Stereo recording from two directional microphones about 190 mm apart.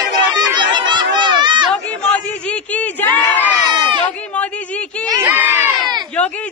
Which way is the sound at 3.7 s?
25° right (ahead or behind).